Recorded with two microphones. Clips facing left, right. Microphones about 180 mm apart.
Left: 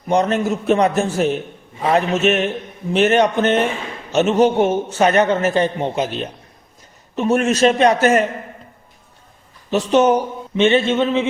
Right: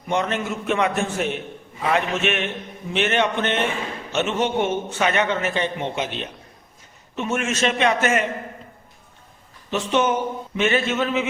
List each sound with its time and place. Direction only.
0.1 s a man's voice: 40° left (ahead or behind)
9.6 s a man's voice: 40° left (ahead or behind)
10.6 s speech: 25° left (ahead or behind)